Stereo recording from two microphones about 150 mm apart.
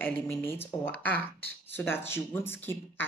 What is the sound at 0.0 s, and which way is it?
Speech, 15° left (ahead or behind).